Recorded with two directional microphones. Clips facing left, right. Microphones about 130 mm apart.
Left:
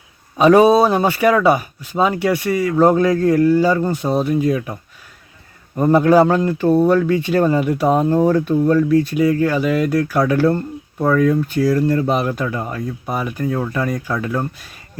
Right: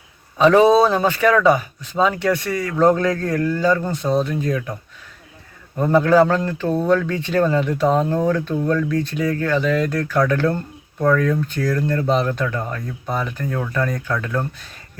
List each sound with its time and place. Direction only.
0.3 s speech: 15° left (ahead or behind)